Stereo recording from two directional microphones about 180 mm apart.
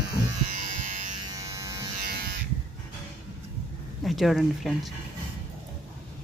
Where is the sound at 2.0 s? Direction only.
60° right (ahead or behind).